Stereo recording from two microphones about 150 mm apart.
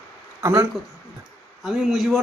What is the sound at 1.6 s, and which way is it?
Speech, centre (ahead or behind).